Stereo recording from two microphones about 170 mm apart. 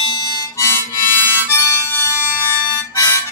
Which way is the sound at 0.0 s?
20° left (ahead or behind).